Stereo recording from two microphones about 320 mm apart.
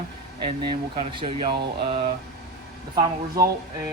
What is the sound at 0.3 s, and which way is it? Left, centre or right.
Speech, right.